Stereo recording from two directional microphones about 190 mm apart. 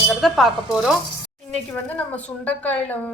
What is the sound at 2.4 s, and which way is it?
Speech, 10° left (ahead or behind).